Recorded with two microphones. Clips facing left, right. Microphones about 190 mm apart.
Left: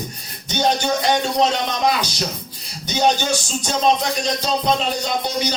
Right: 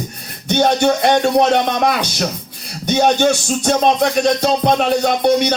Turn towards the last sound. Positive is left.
turn(degrees=-60)  # may be behind; listen again after turning